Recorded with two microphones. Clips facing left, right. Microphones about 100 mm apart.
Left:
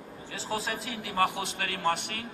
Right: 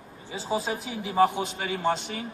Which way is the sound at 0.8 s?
75° left (ahead or behind).